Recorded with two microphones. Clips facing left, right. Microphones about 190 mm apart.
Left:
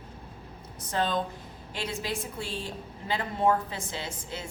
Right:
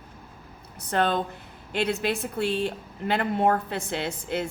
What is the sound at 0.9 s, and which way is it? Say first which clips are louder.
A woman's voice: right 4 dB; 60° right (ahead or behind).